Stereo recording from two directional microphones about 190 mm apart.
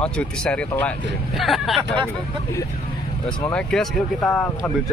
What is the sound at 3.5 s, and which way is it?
Speech, 5° left (ahead or behind).